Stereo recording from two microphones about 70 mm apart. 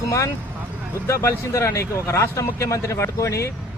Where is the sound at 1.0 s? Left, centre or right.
Left.